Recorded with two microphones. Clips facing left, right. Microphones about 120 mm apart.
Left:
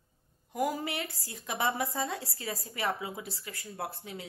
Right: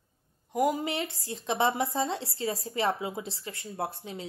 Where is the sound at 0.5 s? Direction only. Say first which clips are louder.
Right 4 dB; 20° right (ahead or behind).